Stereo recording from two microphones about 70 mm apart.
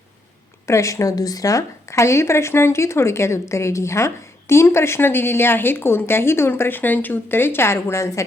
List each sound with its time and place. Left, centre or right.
0.7 s speech: left